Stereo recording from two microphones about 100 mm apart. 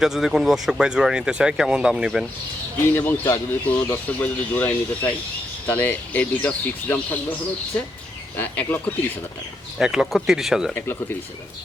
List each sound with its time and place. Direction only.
0.0 s speech: 5° right (ahead or behind)
2.9 s speech: 20° left (ahead or behind)
8.4 s speech: 20° left (ahead or behind)
9.7 s speech: 5° right (ahead or behind)
10.8 s speech: 25° left (ahead or behind)